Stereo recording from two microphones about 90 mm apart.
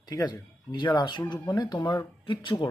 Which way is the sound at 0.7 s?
55° left (ahead or behind).